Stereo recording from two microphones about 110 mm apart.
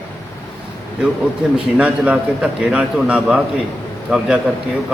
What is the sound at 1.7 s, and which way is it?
A man's voice, 10° right (ahead or behind).